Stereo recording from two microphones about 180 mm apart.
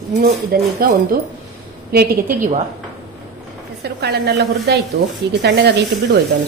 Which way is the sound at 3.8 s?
65° right (ahead or behind).